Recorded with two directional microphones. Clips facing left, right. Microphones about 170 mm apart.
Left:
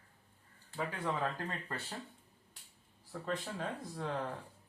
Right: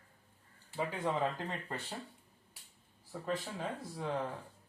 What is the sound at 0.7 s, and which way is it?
Speech, 20° right (ahead or behind).